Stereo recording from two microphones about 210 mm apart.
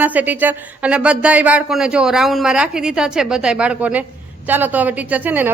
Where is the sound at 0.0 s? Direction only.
10° right (ahead or behind).